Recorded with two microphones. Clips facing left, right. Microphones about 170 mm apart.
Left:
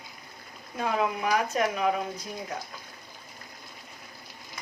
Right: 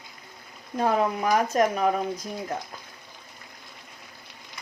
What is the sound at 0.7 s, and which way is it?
Speech, 40° right (ahead or behind).